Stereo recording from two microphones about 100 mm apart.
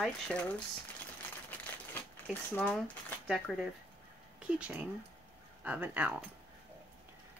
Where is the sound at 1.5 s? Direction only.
20° left (ahead or behind).